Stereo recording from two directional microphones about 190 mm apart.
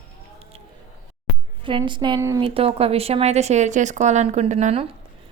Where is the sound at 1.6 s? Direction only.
25° right (ahead or behind).